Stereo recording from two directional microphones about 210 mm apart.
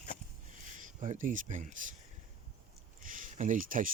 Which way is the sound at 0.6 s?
35° right (ahead or behind).